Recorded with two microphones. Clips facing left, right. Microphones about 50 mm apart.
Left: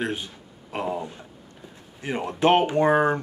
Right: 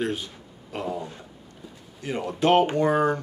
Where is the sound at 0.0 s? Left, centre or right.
Centre.